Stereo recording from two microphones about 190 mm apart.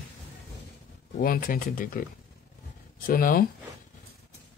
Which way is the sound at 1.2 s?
50° left (ahead or behind).